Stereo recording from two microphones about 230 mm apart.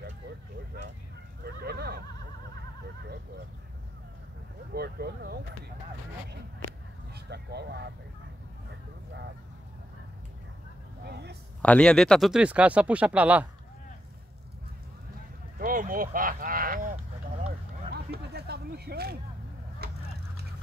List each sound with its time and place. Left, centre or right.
1.4 s a sound: right
4.7 s speech: right
7.2 s speech: right
11.1 s speech: right
11.6 s speech: centre
15.6 s a sound: right